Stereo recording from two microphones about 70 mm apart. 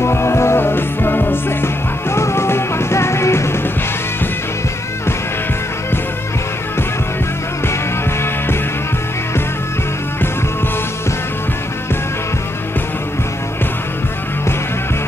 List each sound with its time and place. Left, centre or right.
0.0 s music: left